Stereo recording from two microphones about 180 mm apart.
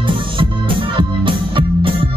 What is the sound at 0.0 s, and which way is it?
Music, 30° right (ahead or behind).